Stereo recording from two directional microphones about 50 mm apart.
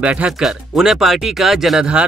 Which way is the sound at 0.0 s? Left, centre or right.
Right.